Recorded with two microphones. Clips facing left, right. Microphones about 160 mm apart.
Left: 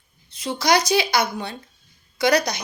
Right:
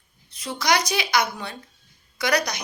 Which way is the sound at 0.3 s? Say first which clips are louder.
Left 3 dB; 25° left (ahead or behind).